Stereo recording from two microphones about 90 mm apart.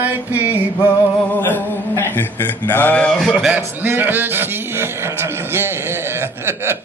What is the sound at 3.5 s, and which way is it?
A man's voice, 25° right (ahead or behind).